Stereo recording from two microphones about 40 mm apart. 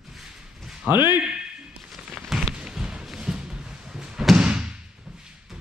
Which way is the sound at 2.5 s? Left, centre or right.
Right.